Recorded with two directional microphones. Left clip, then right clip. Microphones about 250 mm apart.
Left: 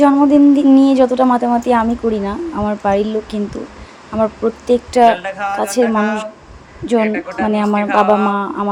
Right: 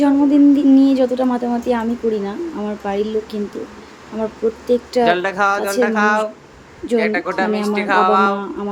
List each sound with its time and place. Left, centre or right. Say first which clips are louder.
0.0 s speech: left 3 dB; centre
5.0 s a woman's voice: left 2 dB; centre
7.5 s speech: left 4 dB; centre
7.9 s a woman's voice: even; centre
8.3 s speech: left 4 dB; centre